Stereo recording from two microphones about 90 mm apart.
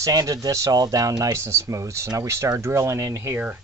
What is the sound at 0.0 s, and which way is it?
Speech, 40° right (ahead or behind).